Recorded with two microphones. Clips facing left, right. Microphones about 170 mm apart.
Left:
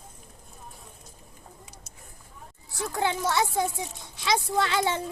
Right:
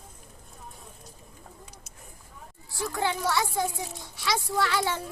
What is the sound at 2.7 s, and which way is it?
A child's voice, 20° left (ahead or behind).